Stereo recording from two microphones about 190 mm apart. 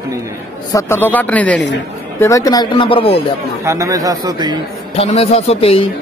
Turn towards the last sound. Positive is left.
turn(degrees=30)  # may be behind; listen again after turning